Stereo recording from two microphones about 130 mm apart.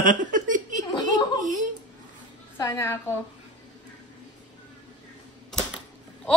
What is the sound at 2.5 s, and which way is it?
Speech, 25° left (ahead or behind).